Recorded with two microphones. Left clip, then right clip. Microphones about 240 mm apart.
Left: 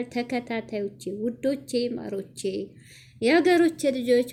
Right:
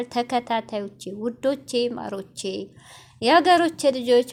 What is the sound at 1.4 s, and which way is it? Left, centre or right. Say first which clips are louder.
A woman's voice: right 4 dB; centre.